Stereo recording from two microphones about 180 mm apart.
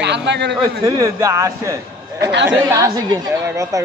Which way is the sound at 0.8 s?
20° right (ahead or behind).